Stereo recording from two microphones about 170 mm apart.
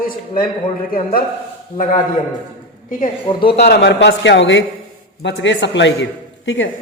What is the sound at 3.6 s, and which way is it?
Speech, 75° left (ahead or behind).